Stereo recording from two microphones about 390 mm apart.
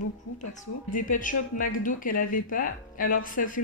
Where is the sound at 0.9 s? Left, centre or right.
Centre.